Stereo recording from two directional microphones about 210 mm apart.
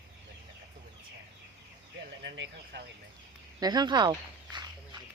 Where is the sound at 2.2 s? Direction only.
55° right (ahead or behind).